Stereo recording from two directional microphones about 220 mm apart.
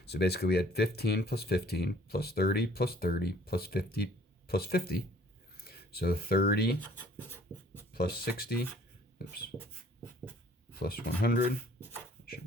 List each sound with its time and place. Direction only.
0.0 s speech: 45° left (ahead or behind)
6.7 s speech: 10° left (ahead or behind)
7.9 s speech: 45° left (ahead or behind)
10.8 s speech: 45° left (ahead or behind)